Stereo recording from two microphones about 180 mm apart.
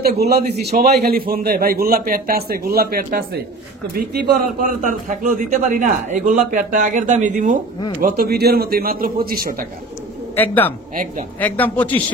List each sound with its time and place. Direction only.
0.0 s a man's voice: 60° right (ahead or behind); by 7.5 s 45° right (ahead or behind)
8.0 s a man's voice: 60° right (ahead or behind)
10.3 s speech: 10° left (ahead or behind)